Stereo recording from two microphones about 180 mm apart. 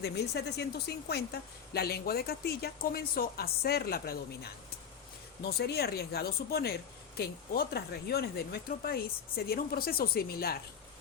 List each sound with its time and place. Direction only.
0.0 s a woman's voice: 65° left (ahead or behind)